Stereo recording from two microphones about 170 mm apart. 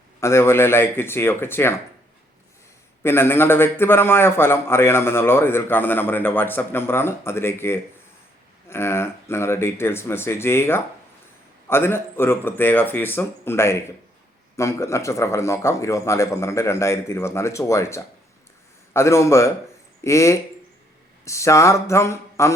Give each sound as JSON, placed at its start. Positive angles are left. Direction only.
{"t": 0.2, "sound": "a man's voice", "side_deg": 15}
{"t": 3.0, "sound": "a man's voice", "side_deg": 15}